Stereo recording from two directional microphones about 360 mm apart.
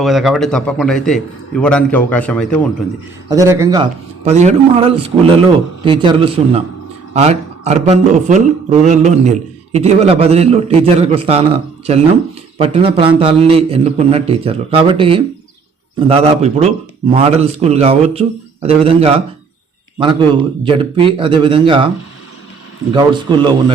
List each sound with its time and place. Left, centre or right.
0.0 s a man's voice: centre
3.2 s a man's voice: centre